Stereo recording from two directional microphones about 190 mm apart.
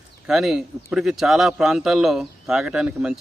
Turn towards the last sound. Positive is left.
turn(degrees=-5)  # may be behind; listen again after turning